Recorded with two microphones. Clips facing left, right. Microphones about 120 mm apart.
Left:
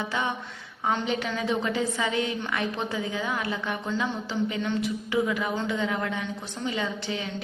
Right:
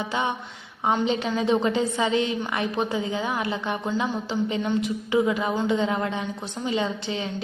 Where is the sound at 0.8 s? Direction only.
25° right (ahead or behind).